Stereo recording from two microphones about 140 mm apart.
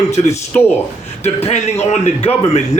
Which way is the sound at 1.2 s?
50° left (ahead or behind).